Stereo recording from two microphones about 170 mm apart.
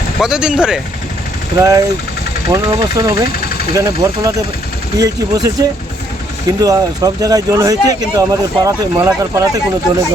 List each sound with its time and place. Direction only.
0.2 s speech: 5° right (ahead or behind)
1.5 s speech: 20° right (ahead or behind)